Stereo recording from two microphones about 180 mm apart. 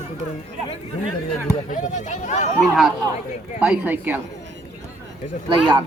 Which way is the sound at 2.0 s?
40° left (ahead or behind).